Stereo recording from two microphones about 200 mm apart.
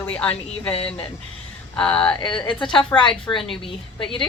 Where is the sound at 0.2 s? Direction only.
5° left (ahead or behind).